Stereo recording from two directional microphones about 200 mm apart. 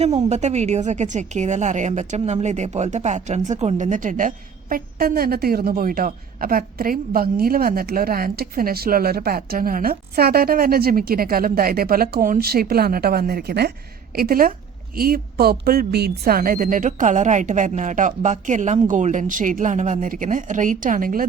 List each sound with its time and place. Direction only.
0.0 s a woman's voice: 35° right (ahead or behind)